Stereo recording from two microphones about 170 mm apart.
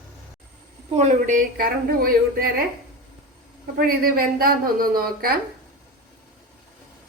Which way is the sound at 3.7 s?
60° right (ahead or behind).